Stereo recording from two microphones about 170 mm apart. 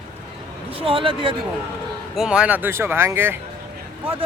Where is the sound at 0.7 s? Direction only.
30° right (ahead or behind).